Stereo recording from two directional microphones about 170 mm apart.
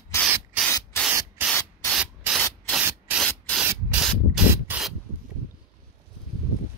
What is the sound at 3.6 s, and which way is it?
Spray, 10° right (ahead or behind).